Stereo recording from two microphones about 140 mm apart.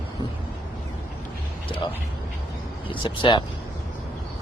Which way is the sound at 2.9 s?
35° left (ahead or behind).